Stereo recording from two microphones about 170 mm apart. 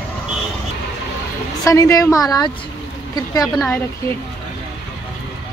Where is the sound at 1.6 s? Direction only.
20° left (ahead or behind).